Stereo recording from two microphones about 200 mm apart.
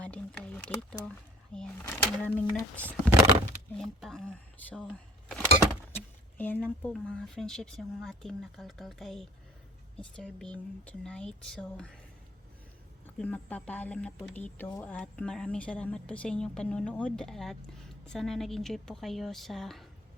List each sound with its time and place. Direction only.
0.0 s a sound: 5° left (ahead or behind)
1.5 s speech: 5° left (ahead or behind)
13.1 s speech: 5° left (ahead or behind)